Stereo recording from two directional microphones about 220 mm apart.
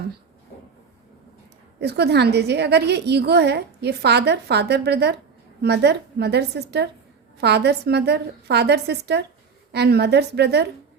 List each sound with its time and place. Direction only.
1.8 s a woman's voice: 45° right (ahead or behind)